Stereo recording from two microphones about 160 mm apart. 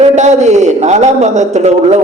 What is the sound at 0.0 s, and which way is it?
A man's voice, 45° right (ahead or behind).